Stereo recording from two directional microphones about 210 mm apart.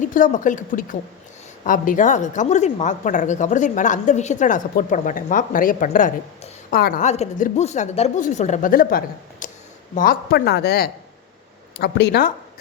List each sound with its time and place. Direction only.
0.0 s a woman's voice: 40° left (ahead or behind)